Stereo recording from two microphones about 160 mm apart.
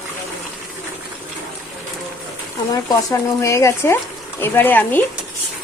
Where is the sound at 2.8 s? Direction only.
20° left (ahead or behind).